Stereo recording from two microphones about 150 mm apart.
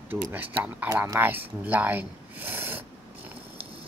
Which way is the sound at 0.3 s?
10° right (ahead or behind).